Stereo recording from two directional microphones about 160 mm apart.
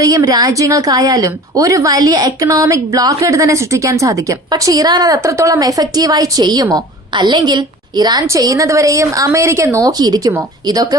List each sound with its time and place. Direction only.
0.0 s a woman's voice: 20° right (ahead or behind)